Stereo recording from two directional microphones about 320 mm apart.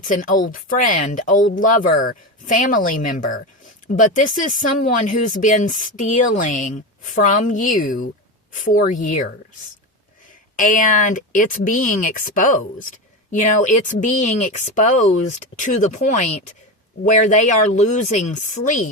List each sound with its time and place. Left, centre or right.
0.0 s speech: left
10.6 s speech: left